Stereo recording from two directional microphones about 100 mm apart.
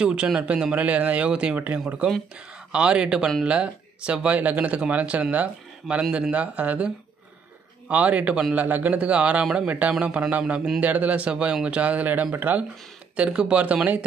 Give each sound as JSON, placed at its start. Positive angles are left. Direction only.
{"t": 0.0, "sound": "a man's voice", "side_deg": -10}
{"t": 7.9, "sound": "a man's voice", "side_deg": -15}